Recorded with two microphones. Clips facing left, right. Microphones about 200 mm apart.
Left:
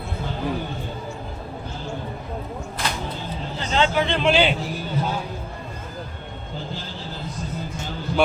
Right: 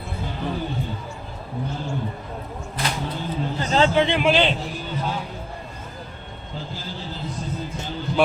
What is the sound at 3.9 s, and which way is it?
Speech, 25° right (ahead or behind).